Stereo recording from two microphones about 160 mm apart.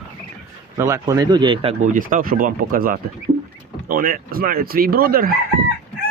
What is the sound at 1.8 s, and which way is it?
Speech, 55° right (ahead or behind).